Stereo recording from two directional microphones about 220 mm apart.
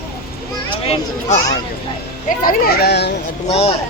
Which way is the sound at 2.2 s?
40° left (ahead or behind).